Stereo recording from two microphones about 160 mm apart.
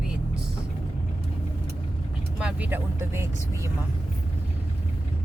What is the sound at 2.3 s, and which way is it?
Speech, 5° right (ahead or behind).